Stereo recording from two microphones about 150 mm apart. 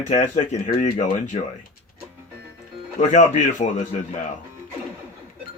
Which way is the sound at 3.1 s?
55° left (ahead or behind).